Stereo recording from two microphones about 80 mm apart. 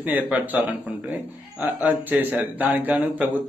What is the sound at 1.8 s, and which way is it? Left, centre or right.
Speech, centre.